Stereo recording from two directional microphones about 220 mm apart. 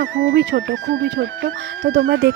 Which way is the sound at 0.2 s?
55° right (ahead or behind).